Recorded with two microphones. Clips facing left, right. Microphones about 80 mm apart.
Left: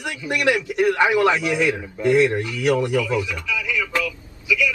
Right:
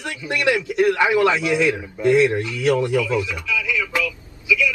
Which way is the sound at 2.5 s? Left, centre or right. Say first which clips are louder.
Right 1 dB; centre.